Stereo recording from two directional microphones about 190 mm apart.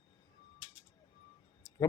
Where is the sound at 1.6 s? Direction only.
15° left (ahead or behind).